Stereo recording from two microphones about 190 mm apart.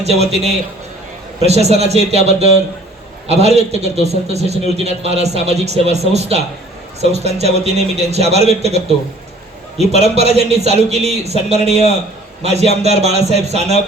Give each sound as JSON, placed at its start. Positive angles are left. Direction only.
{"t": 0.0, "sound": "a man's voice", "side_deg": -35}